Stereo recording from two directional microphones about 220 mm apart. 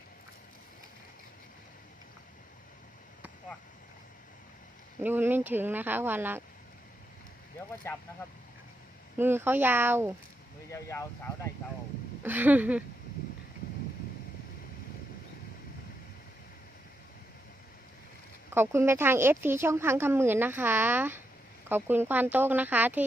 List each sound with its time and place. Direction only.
5.0 s speech: 10° right (ahead or behind)
9.1 s speech: 10° right (ahead or behind)
10.7 s speech: 15° left (ahead or behind)
12.2 s speech: 10° right (ahead or behind)
18.5 s speech: 10° right (ahead or behind)